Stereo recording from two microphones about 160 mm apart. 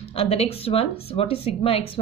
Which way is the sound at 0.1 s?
35° left (ahead or behind).